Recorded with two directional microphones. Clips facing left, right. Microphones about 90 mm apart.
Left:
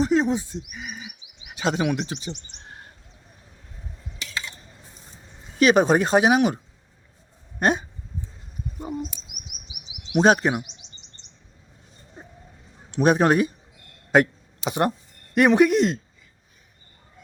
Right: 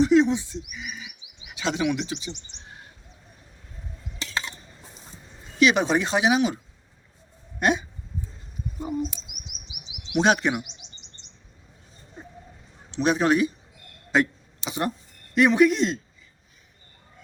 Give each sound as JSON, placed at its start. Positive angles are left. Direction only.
{"t": 0.0, "sound": "bird", "side_deg": 40}
{"t": 1.5, "sound": "speech", "side_deg": 45}
{"t": 4.2, "sound": "a sound", "side_deg": -30}
{"t": 5.5, "sound": "speech", "side_deg": 45}
{"t": 7.6, "sound": "speech", "side_deg": 40}
{"t": 10.2, "sound": "speech", "side_deg": 35}
{"t": 12.9, "sound": "speech", "side_deg": 50}
{"t": 14.1, "sound": "a sound", "side_deg": 50}
{"t": 15.4, "sound": "speech", "side_deg": 55}